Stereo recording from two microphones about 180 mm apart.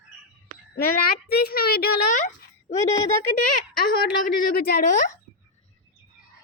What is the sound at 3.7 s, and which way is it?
A woman's voice, 55° left (ahead or behind).